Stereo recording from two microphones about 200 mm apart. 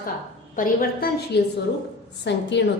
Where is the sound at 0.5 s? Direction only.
45° left (ahead or behind).